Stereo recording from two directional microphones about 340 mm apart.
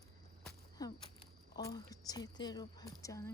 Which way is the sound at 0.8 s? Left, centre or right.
Centre.